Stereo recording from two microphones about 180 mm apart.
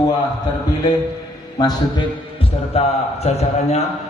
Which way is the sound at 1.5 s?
25° left (ahead or behind).